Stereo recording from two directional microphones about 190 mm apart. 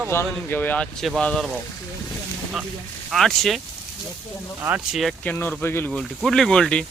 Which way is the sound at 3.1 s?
Centre (ahead or behind).